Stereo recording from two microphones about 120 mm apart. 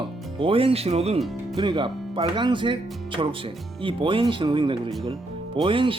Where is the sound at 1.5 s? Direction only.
40° right (ahead or behind).